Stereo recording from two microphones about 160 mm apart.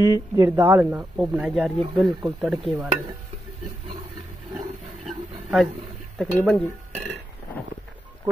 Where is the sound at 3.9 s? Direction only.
40° right (ahead or behind).